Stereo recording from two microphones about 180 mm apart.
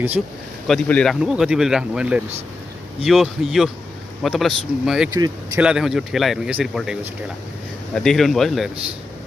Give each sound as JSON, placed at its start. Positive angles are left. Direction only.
{"t": 0.7, "sound": "speech", "side_deg": 5}
{"t": 5.1, "sound": "speech", "side_deg": -20}
{"t": 5.6, "sound": "speech", "side_deg": -5}